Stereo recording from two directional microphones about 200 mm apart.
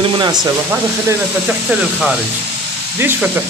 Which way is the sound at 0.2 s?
20° right (ahead or behind).